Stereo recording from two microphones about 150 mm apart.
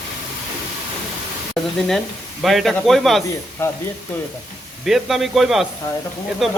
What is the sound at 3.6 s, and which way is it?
Speech, 15° left (ahead or behind).